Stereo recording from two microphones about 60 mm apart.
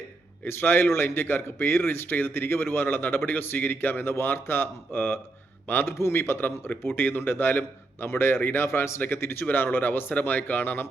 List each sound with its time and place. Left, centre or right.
0.4 s a man's voice: left